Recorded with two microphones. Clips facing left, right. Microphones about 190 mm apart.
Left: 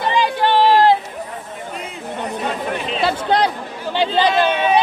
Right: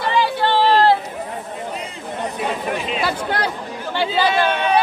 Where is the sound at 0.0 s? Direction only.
20° left (ahead or behind).